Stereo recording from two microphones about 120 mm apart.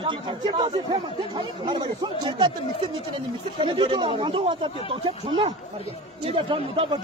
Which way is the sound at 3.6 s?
45° right (ahead or behind).